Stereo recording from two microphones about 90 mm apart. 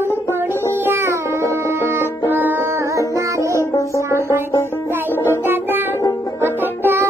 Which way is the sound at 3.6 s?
35° left (ahead or behind).